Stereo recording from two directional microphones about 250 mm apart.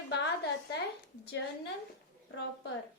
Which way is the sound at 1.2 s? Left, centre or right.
Left.